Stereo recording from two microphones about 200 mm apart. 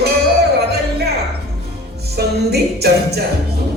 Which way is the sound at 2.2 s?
55° right (ahead or behind).